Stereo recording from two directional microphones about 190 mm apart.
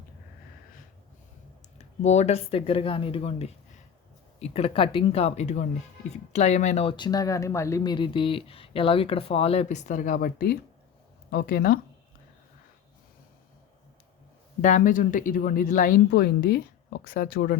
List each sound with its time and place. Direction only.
2.0 s speech: 35° left (ahead or behind); by 11.8 s 50° left (ahead or behind)
14.6 s speech: 45° left (ahead or behind)